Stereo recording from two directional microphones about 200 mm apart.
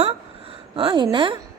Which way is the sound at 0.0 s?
25° right (ahead or behind).